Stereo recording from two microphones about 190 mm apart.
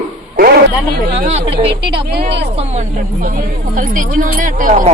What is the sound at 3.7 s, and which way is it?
A man's voice, 45° right (ahead or behind).